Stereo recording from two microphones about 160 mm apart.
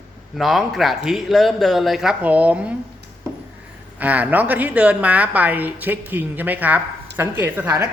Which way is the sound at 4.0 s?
10° right (ahead or behind).